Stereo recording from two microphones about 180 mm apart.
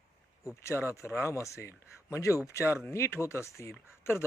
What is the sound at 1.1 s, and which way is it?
Speech, 5° right (ahead or behind).